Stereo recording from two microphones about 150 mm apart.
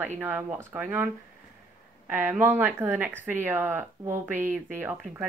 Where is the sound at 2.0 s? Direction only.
10° right (ahead or behind).